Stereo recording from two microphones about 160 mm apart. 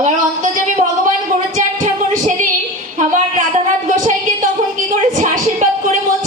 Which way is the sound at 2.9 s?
50° right (ahead or behind).